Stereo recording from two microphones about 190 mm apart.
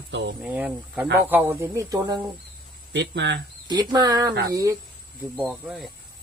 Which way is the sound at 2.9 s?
65° right (ahead or behind).